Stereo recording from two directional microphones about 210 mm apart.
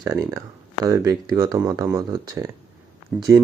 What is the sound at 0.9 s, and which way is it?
Speech, 15° right (ahead or behind).